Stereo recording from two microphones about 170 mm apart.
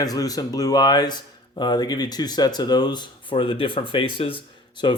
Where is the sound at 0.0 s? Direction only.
20° left (ahead or behind).